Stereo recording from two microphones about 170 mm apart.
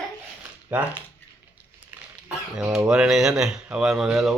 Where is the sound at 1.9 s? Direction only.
10° right (ahead or behind).